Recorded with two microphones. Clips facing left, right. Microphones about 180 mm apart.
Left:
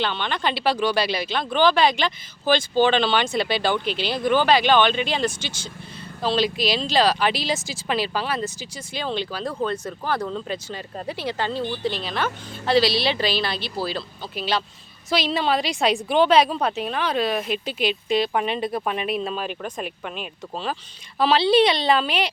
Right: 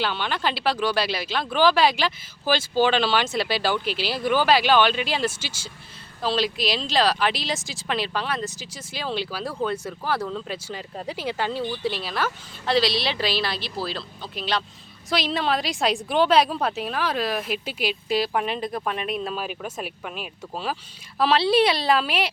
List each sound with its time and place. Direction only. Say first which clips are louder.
0.0 s a woman's voice: left 1 dB; 5° right (ahead or behind)